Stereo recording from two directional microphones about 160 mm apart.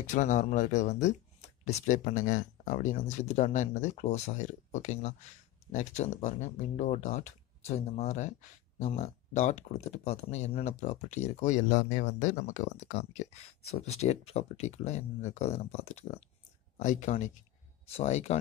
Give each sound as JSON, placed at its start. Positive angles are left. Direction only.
{"t": 0.0, "sound": "speech", "side_deg": 50}